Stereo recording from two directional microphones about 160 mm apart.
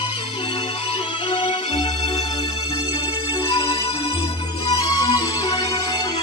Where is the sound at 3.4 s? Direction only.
25° left (ahead or behind).